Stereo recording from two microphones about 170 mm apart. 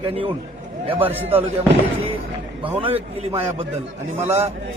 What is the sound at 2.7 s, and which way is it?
Speech, 35° right (ahead or behind).